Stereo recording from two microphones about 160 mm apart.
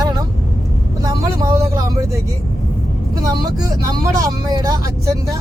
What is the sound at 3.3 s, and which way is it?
Speech, 25° right (ahead or behind).